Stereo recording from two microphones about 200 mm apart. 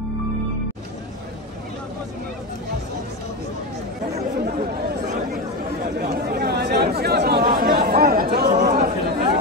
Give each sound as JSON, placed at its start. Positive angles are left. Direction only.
{"t": 4.5, "sound": "chatter", "side_deg": -50}
{"t": 5.9, "sound": "chatter", "side_deg": -50}